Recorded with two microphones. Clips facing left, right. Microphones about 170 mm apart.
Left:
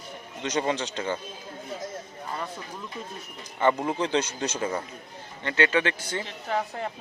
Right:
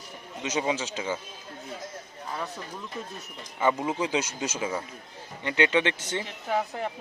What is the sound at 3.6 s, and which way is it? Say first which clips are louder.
A man's voice: left 2 dB; 5° right (ahead or behind).